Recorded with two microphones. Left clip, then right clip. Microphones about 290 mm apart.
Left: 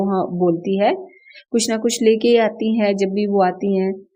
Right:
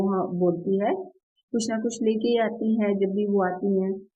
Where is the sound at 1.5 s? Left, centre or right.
Left.